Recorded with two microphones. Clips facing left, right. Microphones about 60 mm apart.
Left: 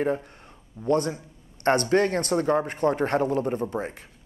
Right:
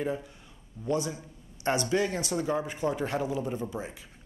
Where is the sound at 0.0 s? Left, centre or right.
Left.